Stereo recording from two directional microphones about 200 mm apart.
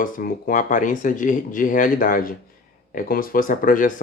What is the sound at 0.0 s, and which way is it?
Speech, 45° left (ahead or behind).